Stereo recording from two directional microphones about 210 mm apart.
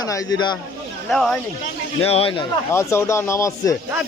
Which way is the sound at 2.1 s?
25° left (ahead or behind).